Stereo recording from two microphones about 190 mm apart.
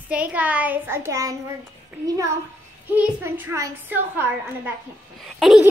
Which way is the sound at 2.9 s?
10° right (ahead or behind).